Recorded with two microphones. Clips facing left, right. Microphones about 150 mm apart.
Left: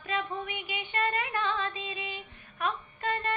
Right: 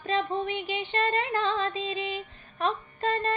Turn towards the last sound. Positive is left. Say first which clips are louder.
# right 4 dB
turn(degrees=-30)  # may be behind; listen again after turning